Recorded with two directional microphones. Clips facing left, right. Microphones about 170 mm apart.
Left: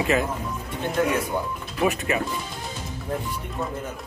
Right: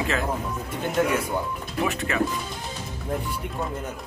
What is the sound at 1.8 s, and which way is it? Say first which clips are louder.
Speech: left 4 dB; 20° left (ahead or behind).